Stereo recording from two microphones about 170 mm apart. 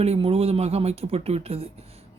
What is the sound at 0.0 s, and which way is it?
Speech, 35° right (ahead or behind).